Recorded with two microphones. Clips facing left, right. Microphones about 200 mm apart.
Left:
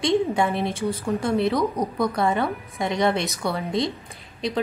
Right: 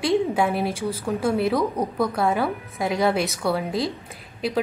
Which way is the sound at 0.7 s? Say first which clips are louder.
Left 1 dB; 30° right (ahead or behind).